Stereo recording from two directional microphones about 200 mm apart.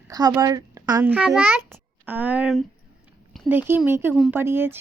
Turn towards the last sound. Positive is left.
turn(degrees=-10)  # may be behind; listen again after turning